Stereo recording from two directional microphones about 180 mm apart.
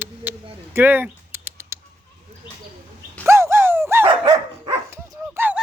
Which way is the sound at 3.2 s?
15° right (ahead or behind).